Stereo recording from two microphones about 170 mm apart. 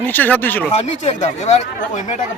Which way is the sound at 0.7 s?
40° left (ahead or behind).